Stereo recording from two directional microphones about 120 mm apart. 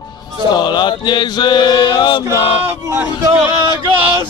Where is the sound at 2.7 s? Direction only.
20° right (ahead or behind).